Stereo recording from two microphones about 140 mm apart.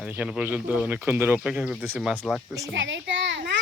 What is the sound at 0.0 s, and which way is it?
Speech, 10° right (ahead or behind).